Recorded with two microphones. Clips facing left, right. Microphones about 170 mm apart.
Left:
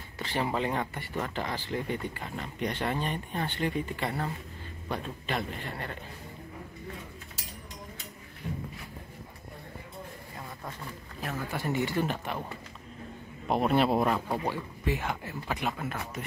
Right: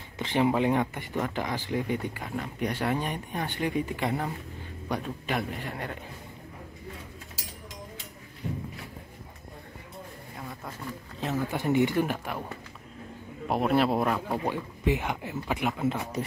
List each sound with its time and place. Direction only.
0.2 s speech: 15° right (ahead or behind)
11.3 s speech: 20° right (ahead or behind)
13.5 s speech: centre (ahead or behind)
14.5 s speech: 15° right (ahead or behind)